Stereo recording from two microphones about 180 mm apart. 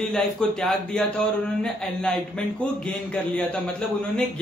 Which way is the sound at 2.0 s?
5° left (ahead or behind).